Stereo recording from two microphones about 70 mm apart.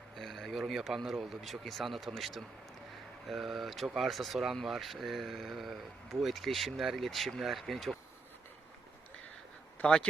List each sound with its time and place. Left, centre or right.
0.2 s speech: centre
9.8 s speech: centre